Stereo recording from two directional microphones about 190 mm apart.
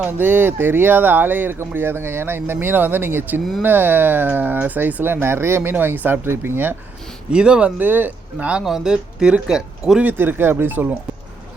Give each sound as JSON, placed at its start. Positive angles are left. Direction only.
{"t": 0.0, "sound": "speech", "side_deg": -10}